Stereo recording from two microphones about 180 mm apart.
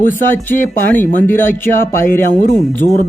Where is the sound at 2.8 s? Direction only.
45° left (ahead or behind).